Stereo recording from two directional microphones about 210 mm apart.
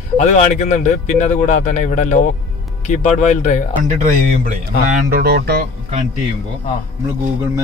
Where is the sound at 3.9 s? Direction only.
40° right (ahead or behind).